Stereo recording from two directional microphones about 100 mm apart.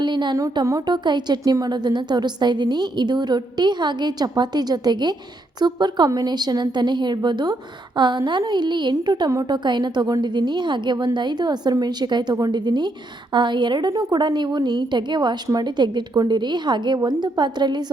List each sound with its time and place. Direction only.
0.0 s a sound: 50° right (ahead or behind)
0.6 s speech: 30° right (ahead or behind)
0.9 s a woman's voice: 45° right (ahead or behind)